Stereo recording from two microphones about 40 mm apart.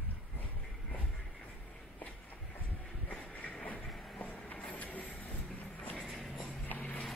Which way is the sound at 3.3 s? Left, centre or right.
Left.